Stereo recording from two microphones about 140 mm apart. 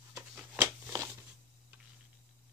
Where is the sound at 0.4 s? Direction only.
10° right (ahead or behind).